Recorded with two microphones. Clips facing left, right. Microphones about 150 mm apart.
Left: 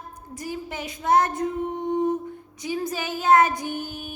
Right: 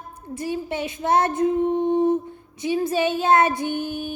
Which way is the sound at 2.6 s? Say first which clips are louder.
Right 7 dB; 25° right (ahead or behind).